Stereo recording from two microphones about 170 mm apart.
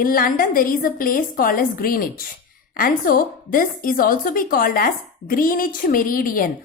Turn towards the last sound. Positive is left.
turn(degrees=55)  # may be behind; listen again after turning